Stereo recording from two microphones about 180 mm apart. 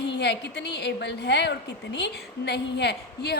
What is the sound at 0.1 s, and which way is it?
A woman's voice, 70° left (ahead or behind).